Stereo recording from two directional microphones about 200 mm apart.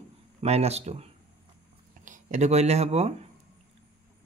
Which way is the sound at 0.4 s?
30° right (ahead or behind).